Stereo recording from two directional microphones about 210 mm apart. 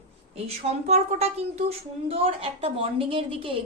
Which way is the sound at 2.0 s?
25° right (ahead or behind).